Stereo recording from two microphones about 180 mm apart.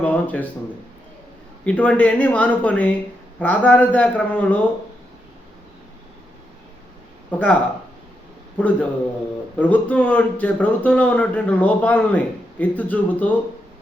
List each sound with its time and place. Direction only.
0.0 s speech: 10° left (ahead or behind)
1.6 s a man's voice: 5° left (ahead or behind)
7.3 s a man's voice: 10° left (ahead or behind)